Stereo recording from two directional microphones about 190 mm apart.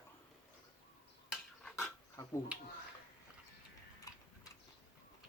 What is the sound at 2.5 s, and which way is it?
Speech, 5° right (ahead or behind).